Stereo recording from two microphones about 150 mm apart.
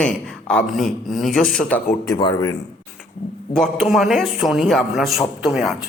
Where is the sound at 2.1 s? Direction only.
30° left (ahead or behind).